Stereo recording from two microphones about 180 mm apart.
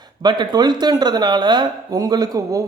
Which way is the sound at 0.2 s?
25° right (ahead or behind).